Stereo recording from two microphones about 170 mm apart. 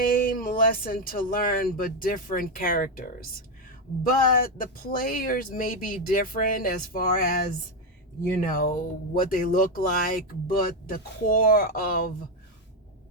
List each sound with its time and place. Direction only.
0.0 s speech: 55° left (ahead or behind)